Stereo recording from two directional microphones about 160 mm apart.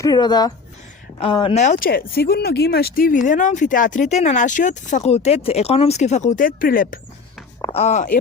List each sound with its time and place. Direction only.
0.0 s speech: 25° left (ahead or behind)
1.5 s speech: 50° left (ahead or behind)
7.7 s speech: 45° left (ahead or behind)